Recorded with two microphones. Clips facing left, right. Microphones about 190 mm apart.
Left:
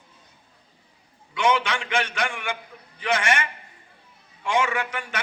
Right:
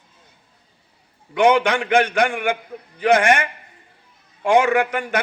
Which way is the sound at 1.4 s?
55° right (ahead or behind).